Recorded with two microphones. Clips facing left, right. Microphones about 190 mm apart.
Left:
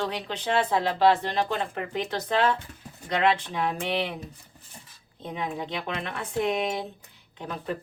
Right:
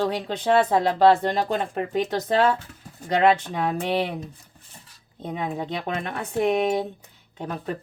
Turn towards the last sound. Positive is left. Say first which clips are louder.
# right 2 dB
turn(degrees=-45)  # may be behind; listen again after turning